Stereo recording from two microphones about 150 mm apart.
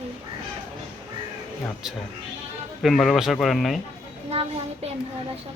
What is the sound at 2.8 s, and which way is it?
Speech, centre (ahead or behind).